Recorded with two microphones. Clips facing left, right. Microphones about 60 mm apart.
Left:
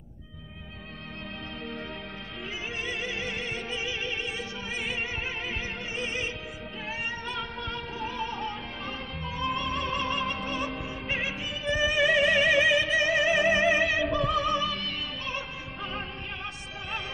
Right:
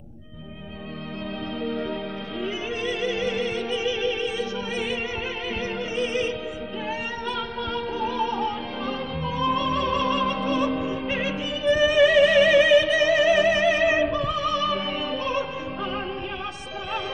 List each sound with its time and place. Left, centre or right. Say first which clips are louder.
2.4 s opera: right 7 dB; left
5.9 s music: right 8 dB; centre